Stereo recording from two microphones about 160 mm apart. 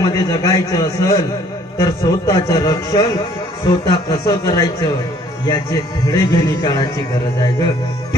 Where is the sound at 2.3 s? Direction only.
25° left (ahead or behind).